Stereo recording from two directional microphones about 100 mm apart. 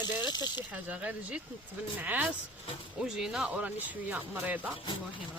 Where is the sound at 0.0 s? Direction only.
45° left (ahead or behind).